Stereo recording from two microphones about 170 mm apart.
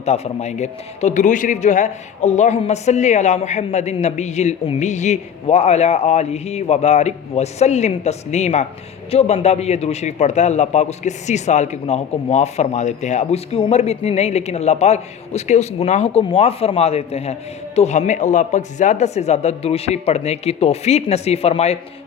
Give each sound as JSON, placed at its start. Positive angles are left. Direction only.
{"t": 0.0, "sound": "a man's voice", "side_deg": 40}